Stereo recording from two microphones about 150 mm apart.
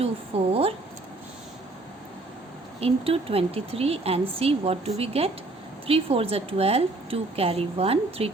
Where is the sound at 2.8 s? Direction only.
40° right (ahead or behind).